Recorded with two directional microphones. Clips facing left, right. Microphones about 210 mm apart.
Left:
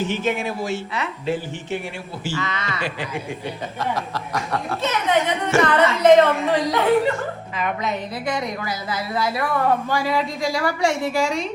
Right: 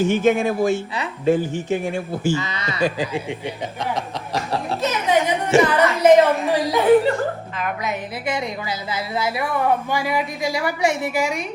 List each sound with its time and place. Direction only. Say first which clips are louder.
0.0 s a man's voice: right 6 dB; 50° right (ahead or behind)
2.3 s a woman's voice: right 2 dB; 20° right (ahead or behind)
4.4 s laughter: right 2 dB; 30° right (ahead or behind)
5.0 s a sound: right 2 dB; 15° right (ahead or behind)
5.6 s a woman's voice: even; 10° right (ahead or behind)
8.3 s a woman's voice: right 1 dB; 25° right (ahead or behind)